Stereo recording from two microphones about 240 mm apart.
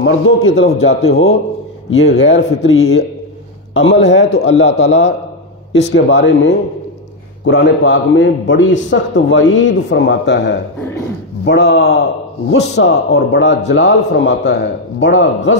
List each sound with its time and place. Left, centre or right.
0.0 s a man's voice: left
2.1 s a man's voice: left
4.3 s a man's voice: left
5.7 s a man's voice: left